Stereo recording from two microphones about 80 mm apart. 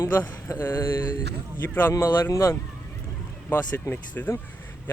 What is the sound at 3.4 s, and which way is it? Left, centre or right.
Speech, left.